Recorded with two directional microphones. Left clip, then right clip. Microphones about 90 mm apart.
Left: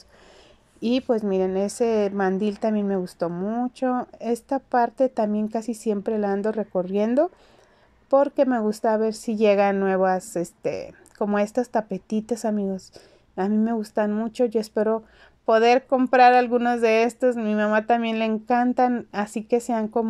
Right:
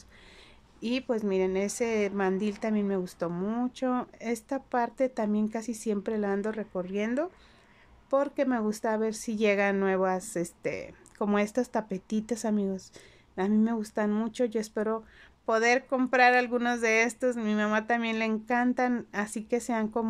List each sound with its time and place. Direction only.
0.7 s speech: 25° left (ahead or behind)
1.0 s a woman's voice: 10° left (ahead or behind)
3.3 s a woman's voice: 5° right (ahead or behind)
3.7 s a woman's voice: 10° left (ahead or behind)
6.8 s speech: 25° left (ahead or behind)
8.1 s a woman's voice: 15° left (ahead or behind)